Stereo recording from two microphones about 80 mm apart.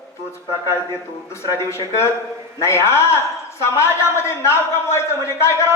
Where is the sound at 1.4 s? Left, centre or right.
Left.